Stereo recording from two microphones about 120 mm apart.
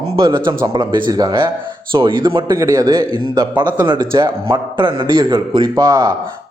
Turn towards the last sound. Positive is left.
turn(degrees=-30)  # may be behind; listen again after turning